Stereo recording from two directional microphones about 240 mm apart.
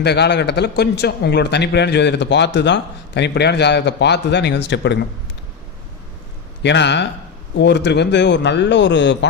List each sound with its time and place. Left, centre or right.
0.0 s speech: left
6.6 s speech: left